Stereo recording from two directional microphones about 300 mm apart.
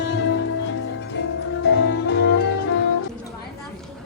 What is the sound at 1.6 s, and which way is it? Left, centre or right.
Music, left.